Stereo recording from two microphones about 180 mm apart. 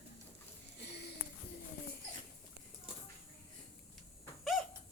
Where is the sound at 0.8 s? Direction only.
70° left (ahead or behind).